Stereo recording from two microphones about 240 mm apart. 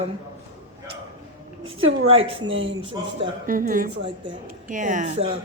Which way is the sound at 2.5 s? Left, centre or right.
Right.